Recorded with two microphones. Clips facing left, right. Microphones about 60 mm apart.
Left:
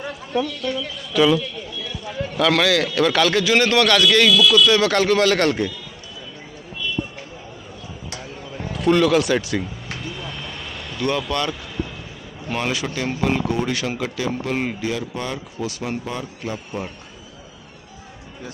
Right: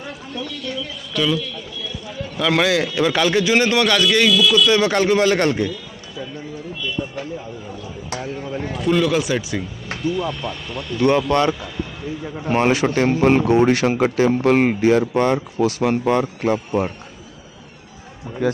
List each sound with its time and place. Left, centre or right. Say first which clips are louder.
0.4 s speech: left 5 dB; centre
2.5 s a man's voice: right 4 dB; centre
8.7 s speech: left 2 dB; centre
11.1 s speech: right 6 dB; right
16.5 s speech: right 9 dB; right